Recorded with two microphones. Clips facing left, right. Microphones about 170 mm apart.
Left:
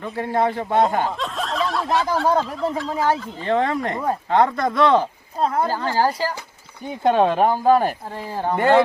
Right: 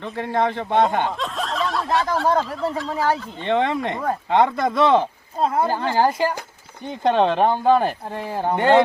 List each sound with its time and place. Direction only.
0.0 s speech: 10° left (ahead or behind)
5.6 s a woman's voice: 20° right (ahead or behind)
6.8 s speech: 10° left (ahead or behind)
8.1 s speech: 15° right (ahead or behind)